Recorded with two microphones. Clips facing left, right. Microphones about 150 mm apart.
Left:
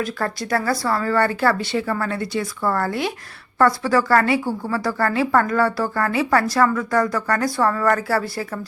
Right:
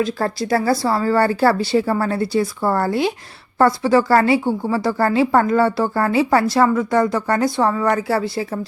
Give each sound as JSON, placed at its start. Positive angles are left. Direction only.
{"t": 0.0, "sound": "speech", "side_deg": -30}